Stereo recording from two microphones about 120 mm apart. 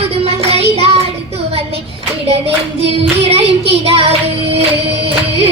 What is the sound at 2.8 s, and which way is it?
Child singing, 55° right (ahead or behind).